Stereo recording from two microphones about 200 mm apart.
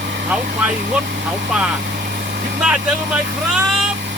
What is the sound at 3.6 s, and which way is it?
Vehicle, 5° right (ahead or behind).